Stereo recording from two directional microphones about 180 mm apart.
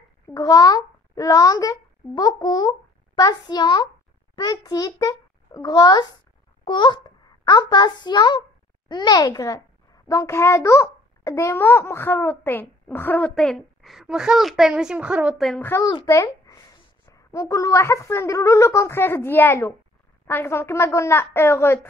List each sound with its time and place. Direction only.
0.3 s a child's voice: 20° left (ahead or behind); by 15.6 s centre (ahead or behind)
15.6 s a child's voice: 15° left (ahead or behind)